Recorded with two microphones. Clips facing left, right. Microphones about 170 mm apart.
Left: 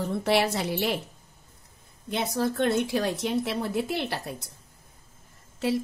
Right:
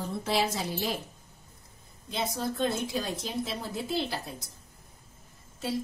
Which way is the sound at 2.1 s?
65° left (ahead or behind).